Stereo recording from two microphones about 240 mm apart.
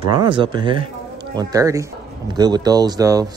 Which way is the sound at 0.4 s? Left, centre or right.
Centre.